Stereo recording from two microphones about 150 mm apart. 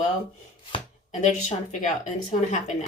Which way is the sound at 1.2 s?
55° left (ahead or behind).